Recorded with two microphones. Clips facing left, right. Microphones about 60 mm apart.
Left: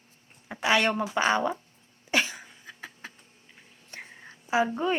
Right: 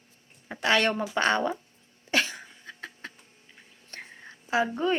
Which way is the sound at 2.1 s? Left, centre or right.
Centre.